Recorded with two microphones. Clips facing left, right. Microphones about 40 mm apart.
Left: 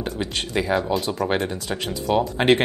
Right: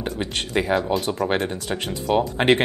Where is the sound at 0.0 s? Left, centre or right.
Right.